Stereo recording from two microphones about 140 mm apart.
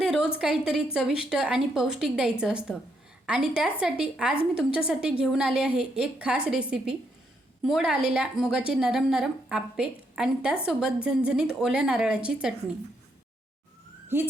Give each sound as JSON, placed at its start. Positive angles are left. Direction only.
{"t": 0.1, "sound": "a woman's voice", "side_deg": -5}
{"t": 14.1, "sound": "a woman's voice", "side_deg": -15}